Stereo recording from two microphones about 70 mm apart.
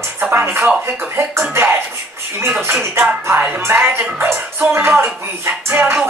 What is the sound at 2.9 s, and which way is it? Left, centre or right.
Music, right.